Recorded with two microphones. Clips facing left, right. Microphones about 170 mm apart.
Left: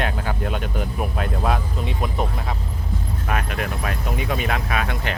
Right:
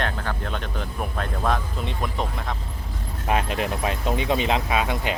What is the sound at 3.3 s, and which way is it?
Speech, 25° right (ahead or behind).